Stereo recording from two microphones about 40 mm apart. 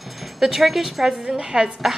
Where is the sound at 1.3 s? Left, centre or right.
Centre.